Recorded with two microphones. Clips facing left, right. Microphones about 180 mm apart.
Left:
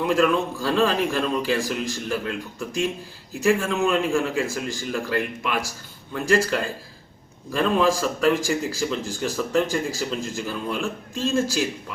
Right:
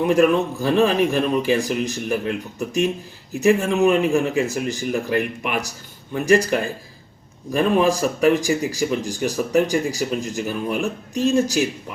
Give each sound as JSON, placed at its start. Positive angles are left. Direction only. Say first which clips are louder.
{"t": 0.0, "sound": "speech", "louder": "right 4 dB", "side_deg": -20}